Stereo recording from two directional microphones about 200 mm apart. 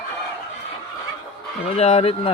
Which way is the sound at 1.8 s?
30° left (ahead or behind).